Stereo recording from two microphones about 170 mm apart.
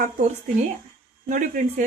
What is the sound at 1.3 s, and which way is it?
Speech, 50° right (ahead or behind).